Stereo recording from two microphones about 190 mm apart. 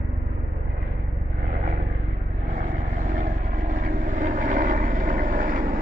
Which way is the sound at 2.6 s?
40° right (ahead or behind).